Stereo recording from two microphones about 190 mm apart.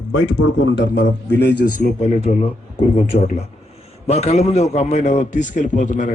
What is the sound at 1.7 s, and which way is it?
A man's voice, 35° left (ahead or behind).